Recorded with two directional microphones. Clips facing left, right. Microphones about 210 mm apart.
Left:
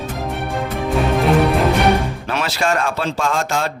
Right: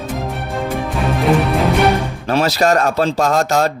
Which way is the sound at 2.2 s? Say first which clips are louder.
Right 6 dB; 40° right (ahead or behind).